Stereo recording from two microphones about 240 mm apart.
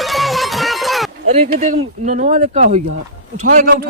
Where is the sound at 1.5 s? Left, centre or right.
Right.